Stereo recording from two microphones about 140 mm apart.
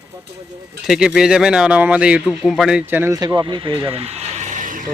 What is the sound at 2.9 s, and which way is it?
Speech, 15° right (ahead or behind).